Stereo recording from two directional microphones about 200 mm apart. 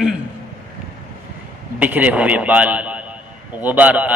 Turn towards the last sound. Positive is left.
turn(degrees=-5)  # may be behind; listen again after turning